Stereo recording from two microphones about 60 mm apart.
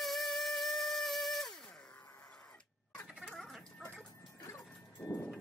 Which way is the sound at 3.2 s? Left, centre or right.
Centre.